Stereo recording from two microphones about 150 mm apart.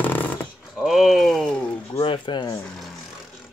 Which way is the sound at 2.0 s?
35° left (ahead or behind).